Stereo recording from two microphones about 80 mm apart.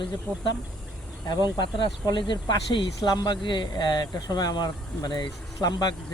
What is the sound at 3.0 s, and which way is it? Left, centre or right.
Speech, left.